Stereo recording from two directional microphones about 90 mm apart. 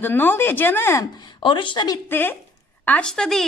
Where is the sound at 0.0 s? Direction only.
25° left (ahead or behind).